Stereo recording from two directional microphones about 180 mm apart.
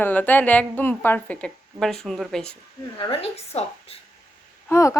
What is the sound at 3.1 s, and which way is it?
Speech, 35° left (ahead or behind).